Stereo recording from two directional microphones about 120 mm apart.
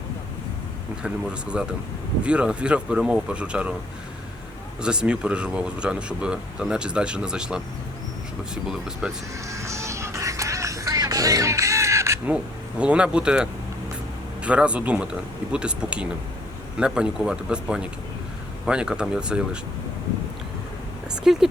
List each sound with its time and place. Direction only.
1.0 s speech: 10° right (ahead or behind)
4.8 s speech: 5° right (ahead or behind)
8.6 s speech: 5° right (ahead or behind)
9.5 s music: 25° right (ahead or behind)
12.8 s speech: 10° right (ahead or behind)
21.3 s speech: 5° right (ahead or behind)